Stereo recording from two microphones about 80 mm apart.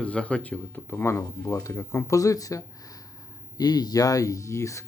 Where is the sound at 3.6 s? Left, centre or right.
Left.